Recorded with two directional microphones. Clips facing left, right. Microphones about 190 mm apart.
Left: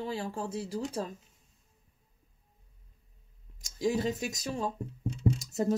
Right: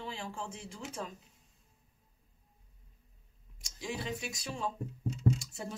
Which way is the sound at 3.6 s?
40° left (ahead or behind).